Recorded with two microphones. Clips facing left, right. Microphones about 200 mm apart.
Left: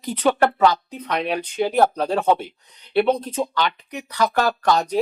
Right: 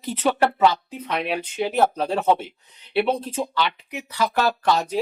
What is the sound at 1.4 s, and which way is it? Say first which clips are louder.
Speech: left 3 dB; 40° left (ahead or behind).